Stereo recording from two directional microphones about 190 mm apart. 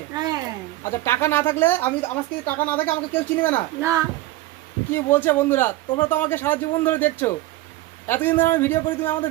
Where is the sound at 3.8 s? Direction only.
15° right (ahead or behind).